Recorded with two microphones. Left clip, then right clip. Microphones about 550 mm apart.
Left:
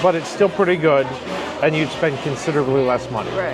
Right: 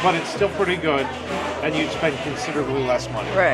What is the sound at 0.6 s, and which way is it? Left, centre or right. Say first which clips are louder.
Speech: left 7 dB; left.